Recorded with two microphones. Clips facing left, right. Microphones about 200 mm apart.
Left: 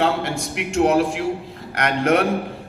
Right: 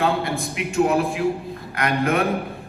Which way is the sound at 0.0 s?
80° left.